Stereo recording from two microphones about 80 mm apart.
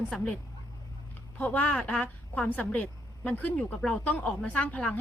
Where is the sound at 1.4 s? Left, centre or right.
Centre.